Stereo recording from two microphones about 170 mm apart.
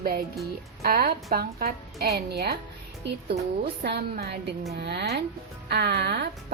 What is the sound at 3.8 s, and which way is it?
A woman's voice, 75° right (ahead or behind).